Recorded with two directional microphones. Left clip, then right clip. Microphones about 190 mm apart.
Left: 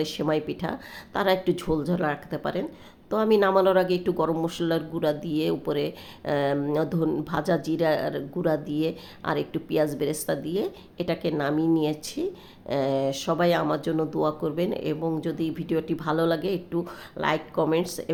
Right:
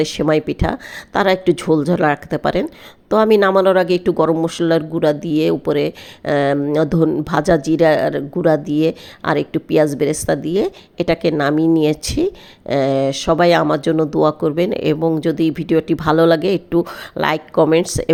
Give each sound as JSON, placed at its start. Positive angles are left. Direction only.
{"t": 0.0, "sound": "speech", "side_deg": -35}